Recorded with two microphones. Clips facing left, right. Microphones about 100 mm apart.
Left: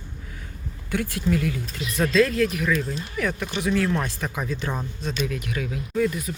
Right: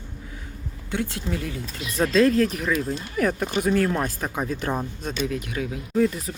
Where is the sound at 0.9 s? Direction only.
20° right (ahead or behind); by 4.7 s 45° right (ahead or behind).